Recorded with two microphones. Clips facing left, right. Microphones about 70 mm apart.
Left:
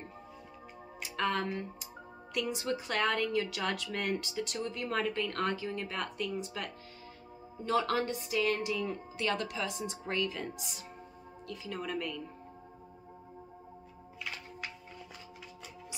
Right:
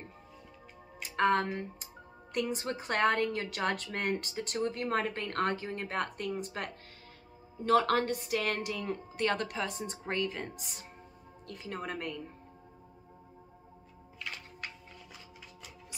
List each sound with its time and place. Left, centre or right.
1.0 s a woman's voice: right
7.6 s a woman's voice: right